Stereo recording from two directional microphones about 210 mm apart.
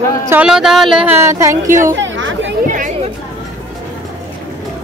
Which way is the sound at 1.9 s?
65° right (ahead or behind).